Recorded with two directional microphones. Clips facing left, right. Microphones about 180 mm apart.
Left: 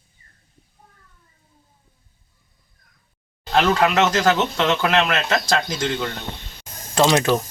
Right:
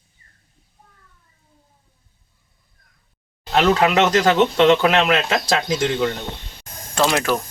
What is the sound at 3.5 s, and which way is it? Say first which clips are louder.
Speech: right 1 dB; 10° right (ahead or behind).